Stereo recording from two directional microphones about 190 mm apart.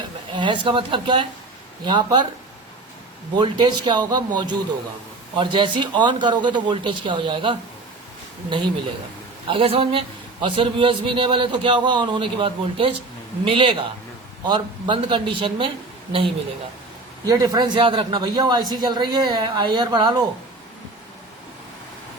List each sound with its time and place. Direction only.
0.3 s a man's voice: 25° right (ahead or behind)
3.3 s a man's voice: 25° right (ahead or behind)
5.4 s a man's voice: 25° right (ahead or behind)
17.2 s a man's voice: 20° right (ahead or behind)